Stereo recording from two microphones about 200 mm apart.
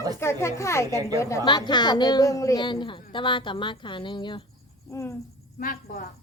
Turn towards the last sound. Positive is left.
turn(degrees=45)  # may be behind; listen again after turning